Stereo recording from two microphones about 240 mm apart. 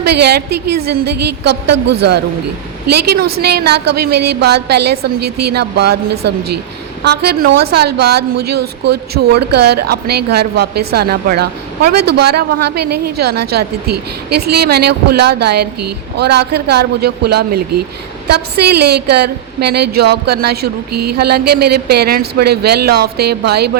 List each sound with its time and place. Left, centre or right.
0.0 s a woman's voice: right
7.0 s a woman's voice: right